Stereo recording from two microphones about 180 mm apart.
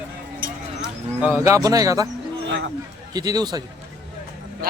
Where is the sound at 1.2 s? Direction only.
10° right (ahead or behind).